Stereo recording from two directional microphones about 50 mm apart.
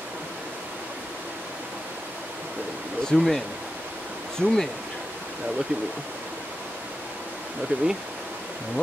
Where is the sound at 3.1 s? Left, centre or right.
Centre.